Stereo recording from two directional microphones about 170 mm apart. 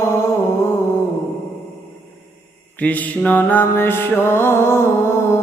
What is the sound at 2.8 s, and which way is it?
Mantra, 10° left (ahead or behind).